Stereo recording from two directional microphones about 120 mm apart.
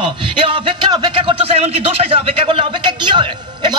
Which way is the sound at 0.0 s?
45° right (ahead or behind).